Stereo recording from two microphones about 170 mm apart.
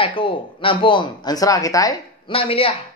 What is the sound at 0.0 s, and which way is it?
Speech, 30° left (ahead or behind).